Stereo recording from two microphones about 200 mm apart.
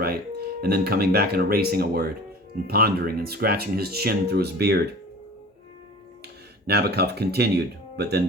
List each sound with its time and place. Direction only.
0.0 s speech: 50° right (ahead or behind)
6.7 s speech: 55° right (ahead or behind)